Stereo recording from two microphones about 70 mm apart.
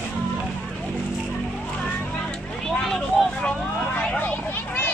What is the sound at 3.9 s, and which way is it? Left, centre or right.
Vehicle, centre.